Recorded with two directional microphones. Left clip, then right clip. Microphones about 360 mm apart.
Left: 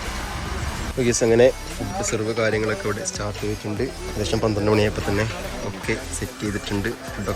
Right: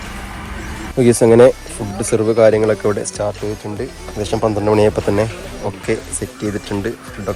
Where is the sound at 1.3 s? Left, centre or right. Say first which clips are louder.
Right 7 dB; right.